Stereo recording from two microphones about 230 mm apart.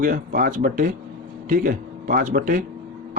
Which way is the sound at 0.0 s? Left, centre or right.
Right.